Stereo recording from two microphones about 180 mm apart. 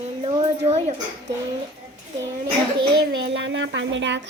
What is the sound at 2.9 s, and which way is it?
A child's voice, 80° right.